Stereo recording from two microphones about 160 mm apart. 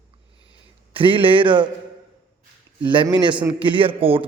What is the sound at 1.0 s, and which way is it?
Speech, 35° right (ahead or behind).